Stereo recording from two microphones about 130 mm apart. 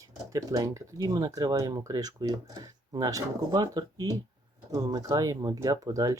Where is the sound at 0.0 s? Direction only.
25° right (ahead or behind).